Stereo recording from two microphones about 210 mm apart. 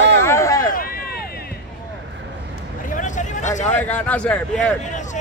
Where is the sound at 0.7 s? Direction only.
45° left (ahead or behind).